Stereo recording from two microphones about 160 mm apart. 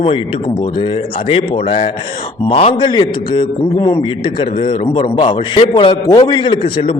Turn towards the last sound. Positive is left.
turn(degrees=35)  # may be behind; listen again after turning